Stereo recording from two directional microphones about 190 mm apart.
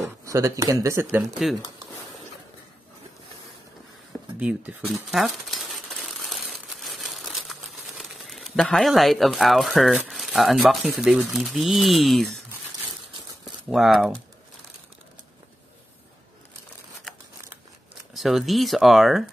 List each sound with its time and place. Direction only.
0.0 s speech: 15° right (ahead or behind)
4.4 s speech: 5° right (ahead or behind)
4.8 s crumpling: centre (ahead or behind)
8.0 s speech: centre (ahead or behind)
13.7 s speech: centre (ahead or behind)
18.1 s speech: centre (ahead or behind)